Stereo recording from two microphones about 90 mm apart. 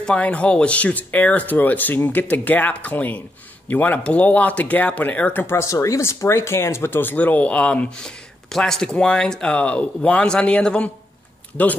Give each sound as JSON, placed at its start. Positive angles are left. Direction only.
{"t": 0.0, "sound": "speech", "side_deg": 15}